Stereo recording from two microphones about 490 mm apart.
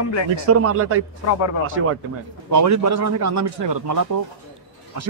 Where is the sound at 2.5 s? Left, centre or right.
Right.